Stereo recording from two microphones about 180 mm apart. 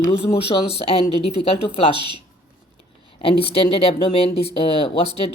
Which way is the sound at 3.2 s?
30° left (ahead or behind).